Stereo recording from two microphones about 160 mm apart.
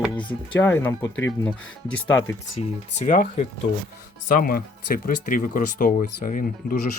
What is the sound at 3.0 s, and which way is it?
Speech, 55° left (ahead or behind).